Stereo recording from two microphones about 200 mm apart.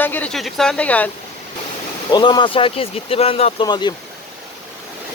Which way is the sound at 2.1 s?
20° left (ahead or behind).